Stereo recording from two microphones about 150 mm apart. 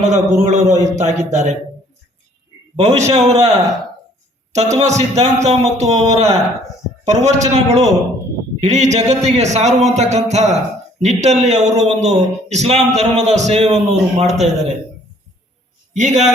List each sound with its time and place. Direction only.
0.1 s speech: 50° right (ahead or behind)
2.7 s speech: 45° right (ahead or behind)
4.5 s speech: 50° right (ahead or behind)
15.9 s a man's voice: 50° right (ahead or behind)